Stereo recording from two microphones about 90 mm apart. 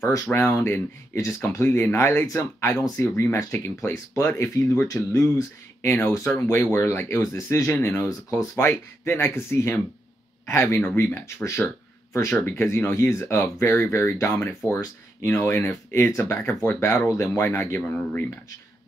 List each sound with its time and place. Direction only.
0.0 s speech: 30° left (ahead or behind)
5.9 s speech: 25° left (ahead or behind)